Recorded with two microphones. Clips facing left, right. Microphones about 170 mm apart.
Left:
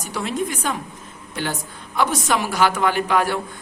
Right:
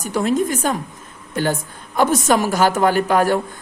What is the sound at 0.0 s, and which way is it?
A man's voice, 45° right (ahead or behind).